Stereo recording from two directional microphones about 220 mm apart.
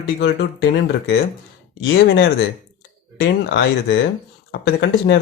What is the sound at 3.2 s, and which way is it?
Speech, 55° left (ahead or behind).